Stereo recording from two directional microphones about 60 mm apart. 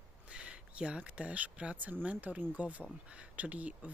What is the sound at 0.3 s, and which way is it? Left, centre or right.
Speech, centre.